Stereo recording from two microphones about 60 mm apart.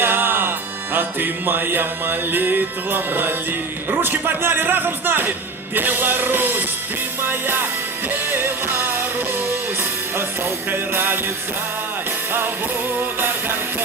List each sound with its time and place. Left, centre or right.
0.0 s music: right
10.7 s music: right
13.0 s music: right